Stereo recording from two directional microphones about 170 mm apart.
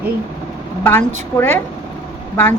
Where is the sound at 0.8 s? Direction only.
15° left (ahead or behind).